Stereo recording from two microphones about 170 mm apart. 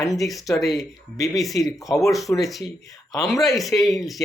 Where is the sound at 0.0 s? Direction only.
20° left (ahead or behind).